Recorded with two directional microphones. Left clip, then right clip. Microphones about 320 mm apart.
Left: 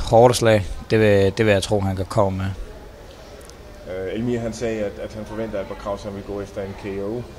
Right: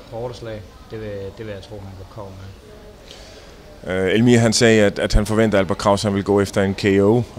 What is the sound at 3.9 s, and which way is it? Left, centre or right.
Speech, right.